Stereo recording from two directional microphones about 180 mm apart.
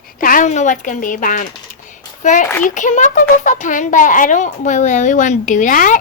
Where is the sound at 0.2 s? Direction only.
50° left (ahead or behind).